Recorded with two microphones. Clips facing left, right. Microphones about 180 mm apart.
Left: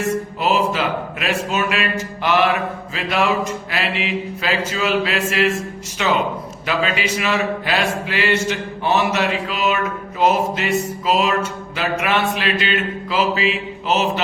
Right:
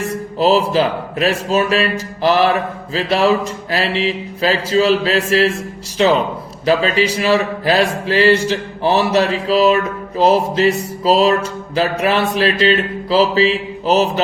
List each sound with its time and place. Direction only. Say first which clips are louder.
0.3 s speech: right 8 dB; 35° right (ahead or behind)